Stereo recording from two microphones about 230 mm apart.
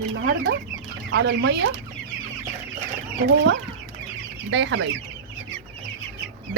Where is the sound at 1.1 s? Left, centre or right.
Right.